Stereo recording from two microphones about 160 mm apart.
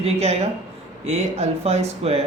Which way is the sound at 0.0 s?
40° right (ahead or behind).